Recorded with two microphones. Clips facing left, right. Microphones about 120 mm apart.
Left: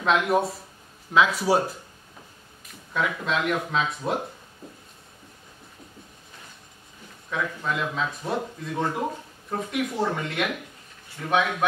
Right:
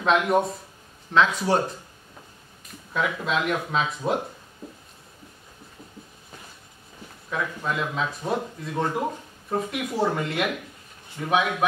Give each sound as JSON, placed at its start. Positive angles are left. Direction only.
{"t": 0.0, "sound": "speech", "side_deg": 0}
{"t": 7.2, "sound": "a man's voice", "side_deg": -5}